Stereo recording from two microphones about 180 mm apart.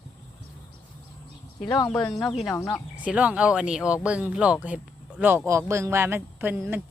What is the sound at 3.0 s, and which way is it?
Speech, 5° right (ahead or behind).